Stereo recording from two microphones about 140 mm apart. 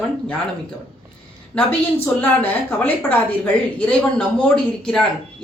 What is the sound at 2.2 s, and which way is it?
A woman's voice, 10° left (ahead or behind).